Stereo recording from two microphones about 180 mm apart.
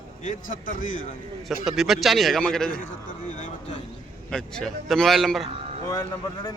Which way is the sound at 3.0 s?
45° left (ahead or behind).